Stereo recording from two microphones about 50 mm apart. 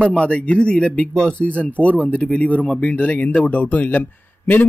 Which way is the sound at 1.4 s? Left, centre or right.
Left.